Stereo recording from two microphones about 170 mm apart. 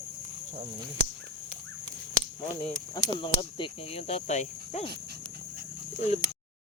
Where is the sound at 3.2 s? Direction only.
30° left (ahead or behind).